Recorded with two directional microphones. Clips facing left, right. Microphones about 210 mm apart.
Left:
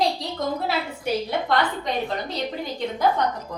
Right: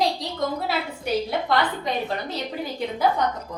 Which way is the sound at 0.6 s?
Centre (ahead or behind).